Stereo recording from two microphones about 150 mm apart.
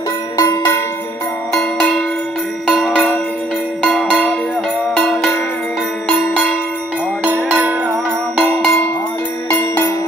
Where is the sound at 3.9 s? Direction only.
Centre (ahead or behind).